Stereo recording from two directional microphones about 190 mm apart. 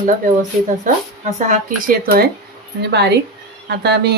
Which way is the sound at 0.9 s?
45° right (ahead or behind).